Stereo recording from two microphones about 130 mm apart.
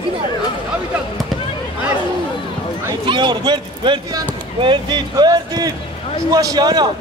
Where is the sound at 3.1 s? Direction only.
35° right (ahead or behind).